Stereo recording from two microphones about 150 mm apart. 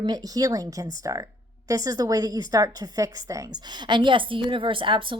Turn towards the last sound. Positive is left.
turn(degrees=-35)  # may be behind; listen again after turning